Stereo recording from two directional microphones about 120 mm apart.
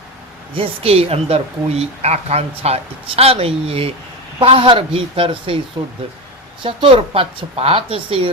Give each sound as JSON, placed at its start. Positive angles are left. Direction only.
{"t": 0.5, "sound": "a woman's voice", "side_deg": -50}
{"t": 5.8, "sound": "speech", "side_deg": -35}